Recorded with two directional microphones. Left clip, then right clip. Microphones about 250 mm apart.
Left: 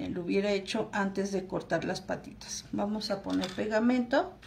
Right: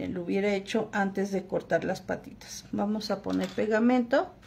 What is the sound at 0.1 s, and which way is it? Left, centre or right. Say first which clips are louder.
Speech: right 1 dB; right.